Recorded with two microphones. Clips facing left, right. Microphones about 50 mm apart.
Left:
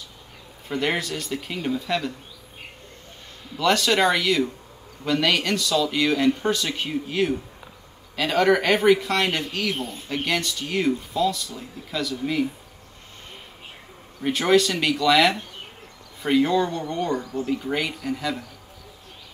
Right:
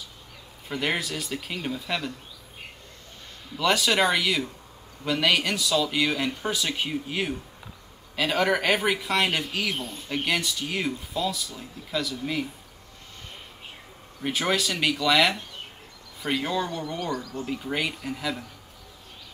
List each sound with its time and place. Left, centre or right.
0.7 s speech: centre
3.5 s speech: centre
14.2 s speech: centre
17.2 s speech: centre
17.5 s speech: centre